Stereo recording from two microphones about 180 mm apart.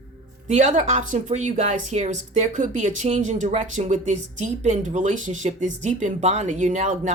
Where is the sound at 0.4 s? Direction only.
40° right (ahead or behind).